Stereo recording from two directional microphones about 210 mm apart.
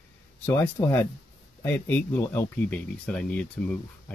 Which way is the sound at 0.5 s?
10° left (ahead or behind).